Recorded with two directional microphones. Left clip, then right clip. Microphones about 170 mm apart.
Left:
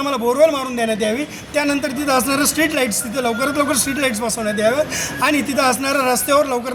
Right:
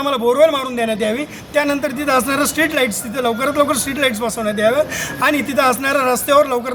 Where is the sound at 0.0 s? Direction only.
30° right (ahead or behind).